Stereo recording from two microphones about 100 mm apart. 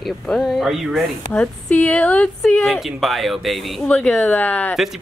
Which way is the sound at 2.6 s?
Centre (ahead or behind).